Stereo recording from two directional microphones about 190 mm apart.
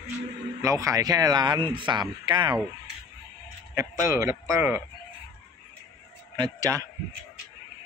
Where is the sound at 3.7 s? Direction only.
15° right (ahead or behind).